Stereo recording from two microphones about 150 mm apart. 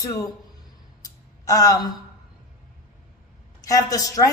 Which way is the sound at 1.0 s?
25° left (ahead or behind).